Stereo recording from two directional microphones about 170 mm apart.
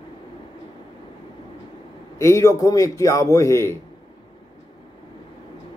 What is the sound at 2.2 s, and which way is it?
A man's voice, 15° left (ahead or behind).